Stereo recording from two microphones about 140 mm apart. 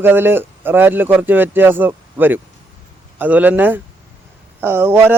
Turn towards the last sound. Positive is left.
turn(degrees=-15)  # may be behind; listen again after turning